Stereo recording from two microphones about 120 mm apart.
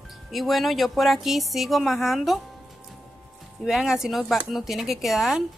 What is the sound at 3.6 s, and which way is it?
Speech, 5° right (ahead or behind).